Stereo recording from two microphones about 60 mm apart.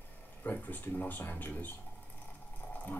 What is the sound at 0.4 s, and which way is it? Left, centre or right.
Speech, left.